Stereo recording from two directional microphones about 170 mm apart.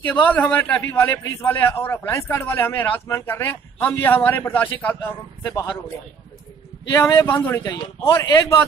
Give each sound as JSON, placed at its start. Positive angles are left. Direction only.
{"t": 0.0, "sound": "a man's voice", "side_deg": 10}
{"t": 6.9, "sound": "a man's voice", "side_deg": 15}